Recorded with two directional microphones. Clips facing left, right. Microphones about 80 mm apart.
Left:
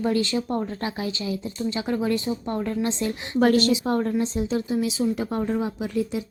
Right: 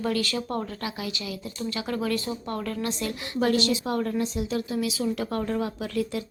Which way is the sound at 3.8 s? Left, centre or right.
Left.